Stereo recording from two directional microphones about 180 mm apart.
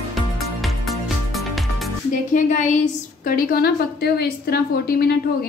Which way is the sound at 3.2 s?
55° left (ahead or behind).